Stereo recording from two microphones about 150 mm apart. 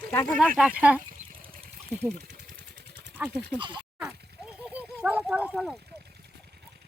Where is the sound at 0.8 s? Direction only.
10° right (ahead or behind).